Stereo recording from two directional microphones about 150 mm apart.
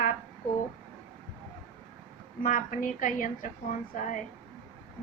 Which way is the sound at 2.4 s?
65° left (ahead or behind).